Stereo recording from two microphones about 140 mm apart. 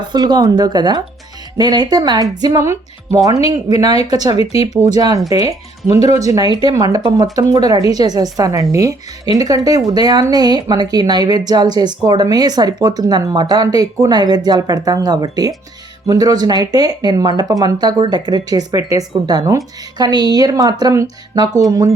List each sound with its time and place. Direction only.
0.1 s speech: 30° right (ahead or behind)
4.3 s speech: 45° left (ahead or behind)
4.9 s speech: 25° right (ahead or behind)